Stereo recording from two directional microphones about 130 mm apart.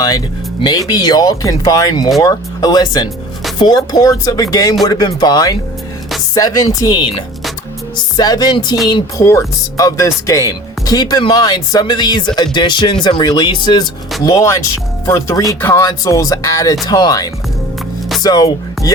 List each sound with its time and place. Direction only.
0.6 s speech: 30° left (ahead or behind)
14.3 s speech: 25° left (ahead or behind)